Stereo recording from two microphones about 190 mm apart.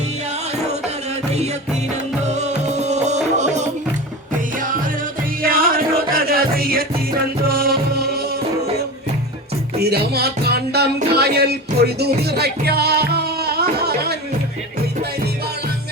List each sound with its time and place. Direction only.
2.2 s music: 35° right (ahead or behind)
5.4 s music: 50° right (ahead or behind)
9.7 s music: 55° right (ahead or behind)